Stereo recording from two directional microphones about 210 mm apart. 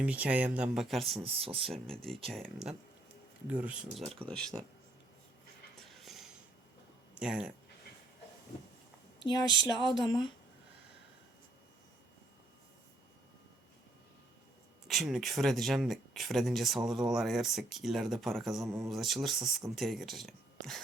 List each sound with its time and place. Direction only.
0.0 s speech: 5° right (ahead or behind)
1.2 s speech: 25° right (ahead or behind)
1.6 s speech: centre (ahead or behind)
6.0 s a sound: centre (ahead or behind)
7.2 s speech: 5° right (ahead or behind)
10.0 s speech: 20° left (ahead or behind)
14.8 s speech: centre (ahead or behind)